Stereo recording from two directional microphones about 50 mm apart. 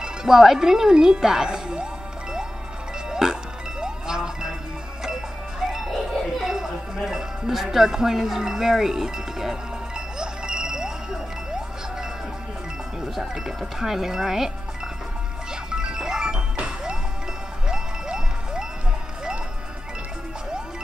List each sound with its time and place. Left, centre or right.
0.0 s speech: centre
3.1 s music: centre
3.8 s wind chime: centre
5.7 s music: centre
13.1 s speech: centre
15.7 s music: centre
17.6 s wind chime: centre